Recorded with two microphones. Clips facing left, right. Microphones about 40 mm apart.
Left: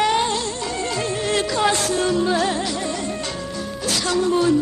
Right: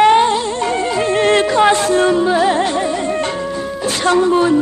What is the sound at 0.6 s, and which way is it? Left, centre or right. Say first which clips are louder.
Music: right 8 dB; right.